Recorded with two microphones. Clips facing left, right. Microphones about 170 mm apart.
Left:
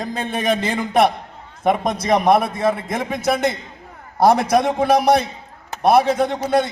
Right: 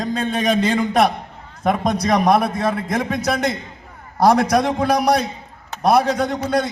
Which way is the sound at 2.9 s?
25° left (ahead or behind).